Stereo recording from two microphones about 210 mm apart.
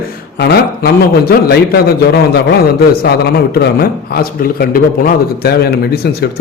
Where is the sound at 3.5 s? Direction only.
45° left (ahead or behind).